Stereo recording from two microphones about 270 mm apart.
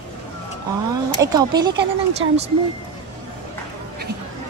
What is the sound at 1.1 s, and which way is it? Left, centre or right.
Speech, centre.